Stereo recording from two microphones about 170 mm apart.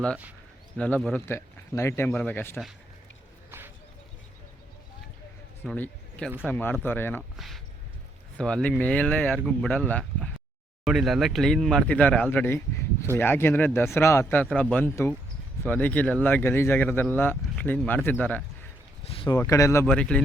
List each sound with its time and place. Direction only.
0.8 s speech: 5° left (ahead or behind)
5.6 s speech: 10° left (ahead or behind)
7.3 s a sound: centre (ahead or behind)
8.4 s speech: 5° left (ahead or behind)
10.8 s speech: centre (ahead or behind)
19.0 s a sound: 35° left (ahead or behind)
19.3 s speech: 20° left (ahead or behind)
19.8 s speech: 5° left (ahead or behind)